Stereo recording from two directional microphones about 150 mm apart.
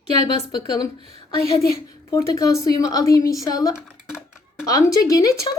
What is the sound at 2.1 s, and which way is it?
A woman's voice, 20° left (ahead or behind).